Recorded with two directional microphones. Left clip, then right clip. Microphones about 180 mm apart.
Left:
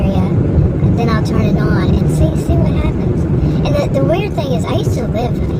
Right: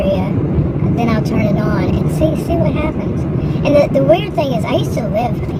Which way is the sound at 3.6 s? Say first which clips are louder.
Right 6 dB; 25° right (ahead or behind).